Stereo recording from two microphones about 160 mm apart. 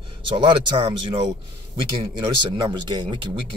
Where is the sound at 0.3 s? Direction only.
30° right (ahead or behind).